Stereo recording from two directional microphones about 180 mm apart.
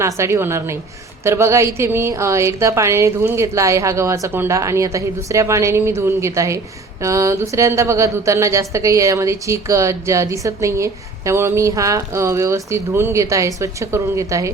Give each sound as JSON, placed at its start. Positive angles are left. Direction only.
{"t": 0.0, "sound": "speech", "side_deg": -15}